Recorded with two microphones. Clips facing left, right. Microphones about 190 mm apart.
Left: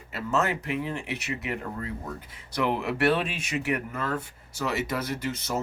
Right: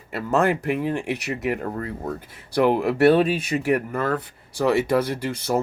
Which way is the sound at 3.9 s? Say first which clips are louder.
Right 7 dB; 55° right (ahead or behind).